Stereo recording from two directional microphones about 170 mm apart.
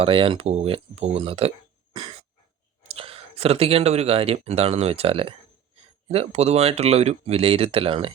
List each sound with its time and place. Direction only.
0.0 s speech: 30° right (ahead or behind)
2.9 s speech: 35° right (ahead or behind)